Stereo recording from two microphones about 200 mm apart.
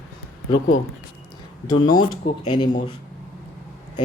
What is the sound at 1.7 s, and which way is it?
Speech, 20° left (ahead or behind).